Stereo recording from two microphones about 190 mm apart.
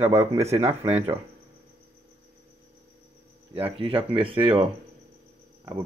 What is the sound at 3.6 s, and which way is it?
Speech, 30° right (ahead or behind).